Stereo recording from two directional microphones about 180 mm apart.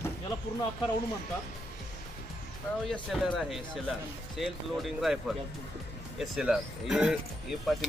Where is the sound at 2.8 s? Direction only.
Centre (ahead or behind).